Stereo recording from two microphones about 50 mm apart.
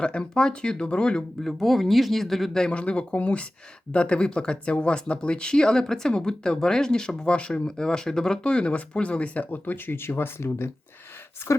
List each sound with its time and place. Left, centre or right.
0.0 s speech: centre
1.4 s speech: centre
2.7 s speech: left